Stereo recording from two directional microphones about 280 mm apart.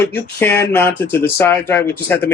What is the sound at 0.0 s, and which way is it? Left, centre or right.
Speech, centre.